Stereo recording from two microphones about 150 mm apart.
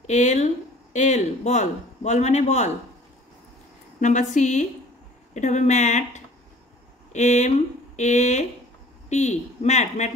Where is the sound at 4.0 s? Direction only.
55° left (ahead or behind).